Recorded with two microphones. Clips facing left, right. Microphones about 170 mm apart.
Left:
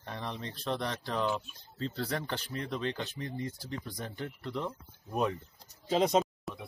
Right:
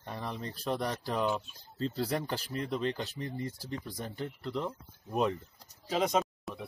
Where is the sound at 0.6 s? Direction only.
5° right (ahead or behind).